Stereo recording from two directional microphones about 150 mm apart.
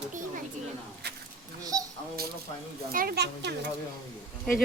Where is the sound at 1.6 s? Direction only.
25° right (ahead or behind).